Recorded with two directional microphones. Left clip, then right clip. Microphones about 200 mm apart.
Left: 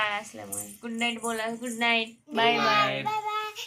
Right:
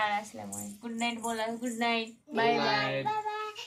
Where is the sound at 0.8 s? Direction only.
30° left (ahead or behind).